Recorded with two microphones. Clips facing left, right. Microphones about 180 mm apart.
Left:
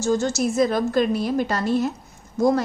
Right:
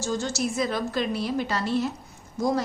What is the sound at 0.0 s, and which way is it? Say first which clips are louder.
A woman's voice: left 6 dB; 45° left (ahead or behind).